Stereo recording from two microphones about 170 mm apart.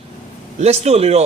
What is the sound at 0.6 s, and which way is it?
Speech, 40° right (ahead or behind).